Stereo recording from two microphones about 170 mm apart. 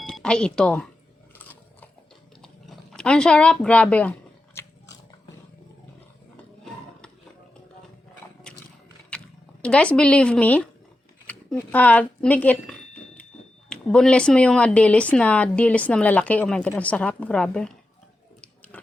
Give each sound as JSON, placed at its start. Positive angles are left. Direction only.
{"t": 0.0, "sound": "speech", "side_deg": 5}
{"t": 1.4, "sound": "biting", "side_deg": 10}
{"t": 2.4, "sound": "chewing", "side_deg": 5}
{"t": 4.6, "sound": "biting", "side_deg": 15}
{"t": 8.5, "sound": "a sound", "side_deg": 5}
{"t": 13.7, "sound": "speech", "side_deg": 5}